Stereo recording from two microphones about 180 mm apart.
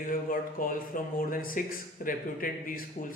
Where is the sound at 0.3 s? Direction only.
50° left (ahead or behind).